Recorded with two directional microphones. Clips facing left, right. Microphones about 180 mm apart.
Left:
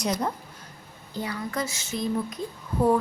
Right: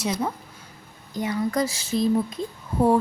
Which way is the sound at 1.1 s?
20° right (ahead or behind).